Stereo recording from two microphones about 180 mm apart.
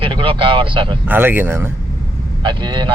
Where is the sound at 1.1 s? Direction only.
10° right (ahead or behind).